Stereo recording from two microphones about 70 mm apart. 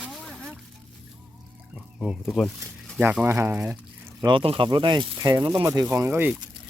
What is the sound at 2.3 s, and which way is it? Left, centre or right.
Speech, centre.